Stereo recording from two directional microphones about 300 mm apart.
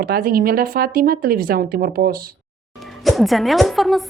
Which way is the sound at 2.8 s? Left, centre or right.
Centre.